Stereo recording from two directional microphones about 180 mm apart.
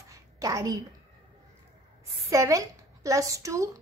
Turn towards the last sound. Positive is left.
turn(degrees=-15)  # may be behind; listen again after turning